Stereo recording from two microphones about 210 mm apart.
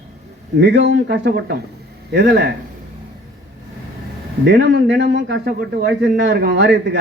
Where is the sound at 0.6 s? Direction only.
55° right (ahead or behind).